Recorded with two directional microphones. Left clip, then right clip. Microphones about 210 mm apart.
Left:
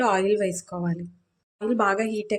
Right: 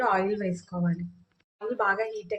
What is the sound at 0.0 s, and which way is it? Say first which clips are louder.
A woman's voice: left 4 dB; 50° left (ahead or behind).